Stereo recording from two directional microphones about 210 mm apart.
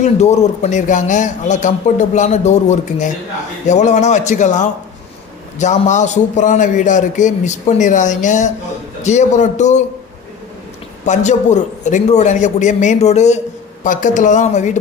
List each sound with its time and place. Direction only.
0.0 s speech: 35° left (ahead or behind)
11.0 s speech: 35° left (ahead or behind)